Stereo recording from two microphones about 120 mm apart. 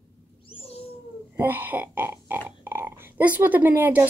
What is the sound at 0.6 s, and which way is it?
Cat, 55° left (ahead or behind).